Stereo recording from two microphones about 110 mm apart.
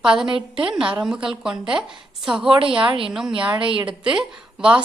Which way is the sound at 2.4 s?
50° right (ahead or behind).